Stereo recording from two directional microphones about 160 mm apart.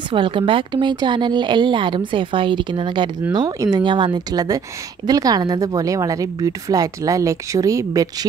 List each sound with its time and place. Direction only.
0.1 s speech: 30° right (ahead or behind)